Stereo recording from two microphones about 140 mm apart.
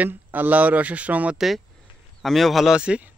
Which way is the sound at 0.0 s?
10° right (ahead or behind).